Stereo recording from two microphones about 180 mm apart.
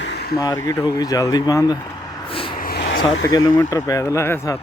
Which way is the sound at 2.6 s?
60° left (ahead or behind).